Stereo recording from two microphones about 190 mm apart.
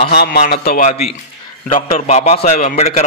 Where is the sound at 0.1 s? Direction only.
55° left (ahead or behind).